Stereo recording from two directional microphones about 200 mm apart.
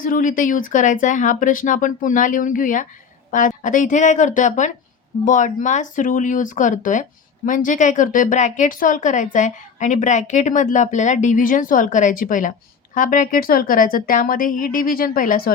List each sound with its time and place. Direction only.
0.0 s a woman's voice: 40° left (ahead or behind)